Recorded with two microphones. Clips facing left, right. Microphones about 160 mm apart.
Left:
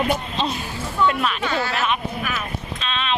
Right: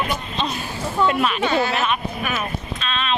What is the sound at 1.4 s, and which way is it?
Speech, 20° right (ahead or behind).